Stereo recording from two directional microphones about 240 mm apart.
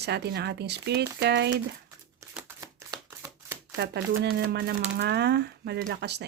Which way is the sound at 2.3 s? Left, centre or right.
Centre.